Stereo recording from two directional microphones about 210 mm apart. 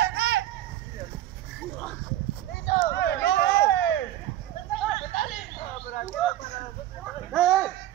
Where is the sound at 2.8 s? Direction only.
55° left (ahead or behind).